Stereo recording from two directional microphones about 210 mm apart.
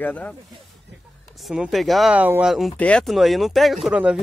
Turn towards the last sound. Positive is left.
turn(degrees=-5)  # may be behind; listen again after turning